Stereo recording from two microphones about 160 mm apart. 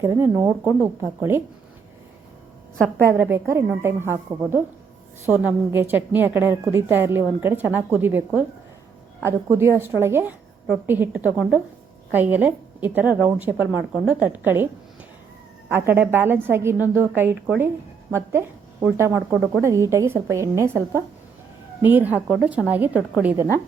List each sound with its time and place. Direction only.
0.0 s a woman's voice: 15° right (ahead or behind)
3.0 s a woman's voice: 15° right (ahead or behind)
15.7 s a woman's voice: 15° right (ahead or behind)